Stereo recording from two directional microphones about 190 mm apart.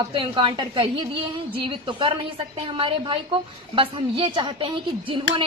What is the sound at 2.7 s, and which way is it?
Speech, 25° right (ahead or behind).